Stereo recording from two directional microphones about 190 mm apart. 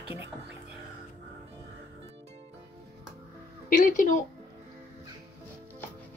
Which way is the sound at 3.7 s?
40° left (ahead or behind).